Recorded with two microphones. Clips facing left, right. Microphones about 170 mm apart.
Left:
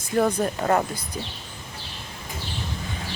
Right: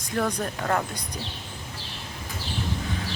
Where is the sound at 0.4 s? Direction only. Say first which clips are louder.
Left 4 dB; 15° left (ahead or behind).